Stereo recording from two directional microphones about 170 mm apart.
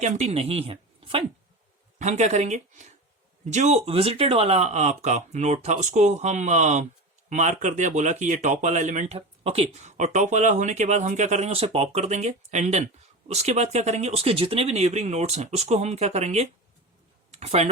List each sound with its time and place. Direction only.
0.0 s speech: 40° right (ahead or behind)
2.0 s speech: 45° right (ahead or behind)